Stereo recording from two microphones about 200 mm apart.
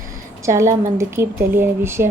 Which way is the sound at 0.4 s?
15° right (ahead or behind).